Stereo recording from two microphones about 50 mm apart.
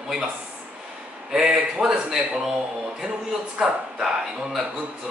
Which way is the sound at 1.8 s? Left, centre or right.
Centre.